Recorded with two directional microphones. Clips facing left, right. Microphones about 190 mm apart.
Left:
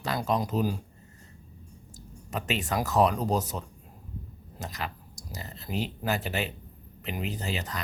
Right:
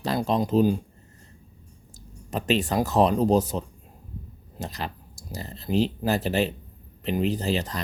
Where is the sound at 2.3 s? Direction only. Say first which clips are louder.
Right 6 dB; 30° right (ahead or behind).